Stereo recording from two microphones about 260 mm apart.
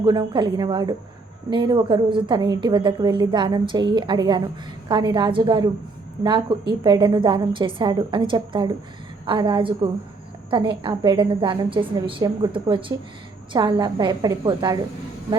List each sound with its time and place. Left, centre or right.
0.0 s a woman's voice: centre